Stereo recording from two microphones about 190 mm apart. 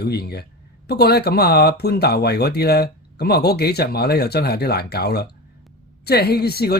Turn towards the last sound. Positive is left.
turn(degrees=55)  # may be behind; listen again after turning